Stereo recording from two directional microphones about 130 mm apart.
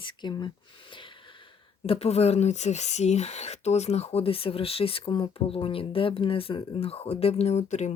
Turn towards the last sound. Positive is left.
turn(degrees=60)  # may be behind; listen again after turning